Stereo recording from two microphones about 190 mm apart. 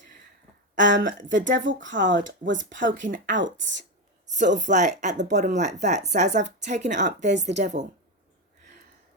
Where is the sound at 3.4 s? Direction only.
75° right (ahead or behind).